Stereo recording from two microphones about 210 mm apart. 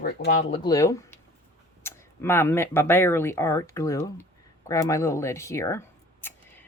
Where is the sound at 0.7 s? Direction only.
15° left (ahead or behind).